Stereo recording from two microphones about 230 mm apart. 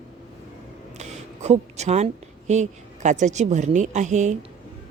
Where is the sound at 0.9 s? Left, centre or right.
Right.